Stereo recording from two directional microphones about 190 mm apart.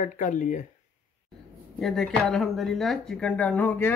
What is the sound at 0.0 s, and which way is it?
Speech, 40° left (ahead or behind).